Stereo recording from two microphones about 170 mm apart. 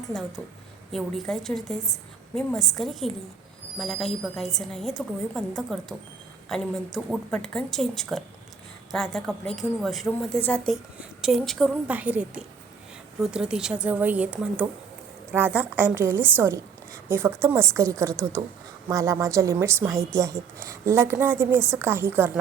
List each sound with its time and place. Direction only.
0.9 s a woman's voice: centre (ahead or behind)